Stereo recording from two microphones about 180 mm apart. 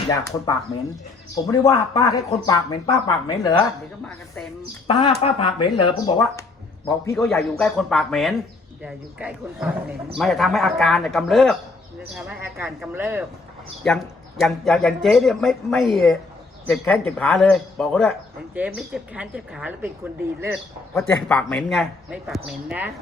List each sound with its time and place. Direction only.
0.1 s speech: 20° left (ahead or behind)
4.9 s a man's voice: 25° left (ahead or behind)
7.3 s a woman's voice: 5° left (ahead or behind)
13.8 s a woman's voice: 5° left (ahead or behind)
21.1 s speech: 5° left (ahead or behind)